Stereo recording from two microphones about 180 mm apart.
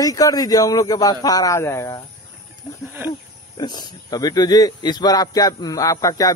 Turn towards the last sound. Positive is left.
turn(degrees=20)  # may be behind; listen again after turning